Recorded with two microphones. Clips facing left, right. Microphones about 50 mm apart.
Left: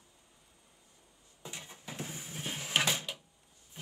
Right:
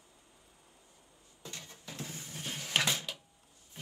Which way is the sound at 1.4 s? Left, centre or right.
Centre.